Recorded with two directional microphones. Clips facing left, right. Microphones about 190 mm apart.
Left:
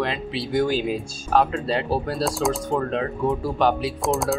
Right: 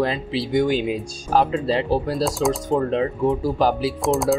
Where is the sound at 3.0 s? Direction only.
30° right (ahead or behind).